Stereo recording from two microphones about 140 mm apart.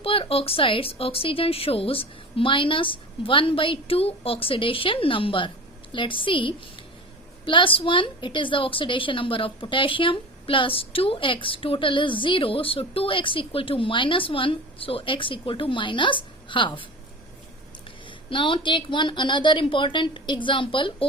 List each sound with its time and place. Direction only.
0.0 s a woman's voice: 40° left (ahead or behind)
18.3 s a woman's voice: 35° left (ahead or behind)